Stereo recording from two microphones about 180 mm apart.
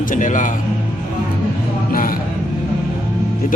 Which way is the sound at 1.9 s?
50° left (ahead or behind).